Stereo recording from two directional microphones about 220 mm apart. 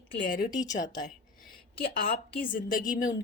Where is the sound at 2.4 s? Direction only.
40° left (ahead or behind).